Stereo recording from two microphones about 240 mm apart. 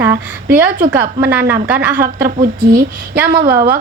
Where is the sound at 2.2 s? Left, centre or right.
Right.